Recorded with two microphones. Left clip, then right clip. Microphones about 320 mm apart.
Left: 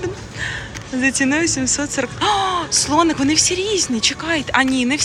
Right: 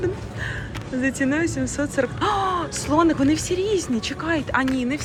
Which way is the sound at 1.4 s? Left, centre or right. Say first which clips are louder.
Left 6 dB; right.